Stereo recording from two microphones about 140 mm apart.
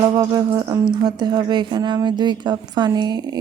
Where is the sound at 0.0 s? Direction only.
30° right (ahead or behind).